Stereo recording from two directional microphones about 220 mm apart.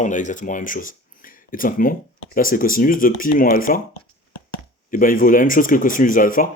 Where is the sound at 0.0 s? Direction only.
35° left (ahead or behind).